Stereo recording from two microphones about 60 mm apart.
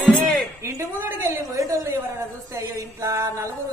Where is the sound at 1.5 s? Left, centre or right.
Right.